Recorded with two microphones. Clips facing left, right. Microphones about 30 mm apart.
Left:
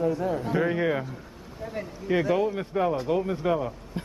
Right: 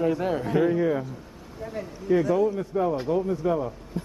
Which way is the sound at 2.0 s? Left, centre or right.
Left.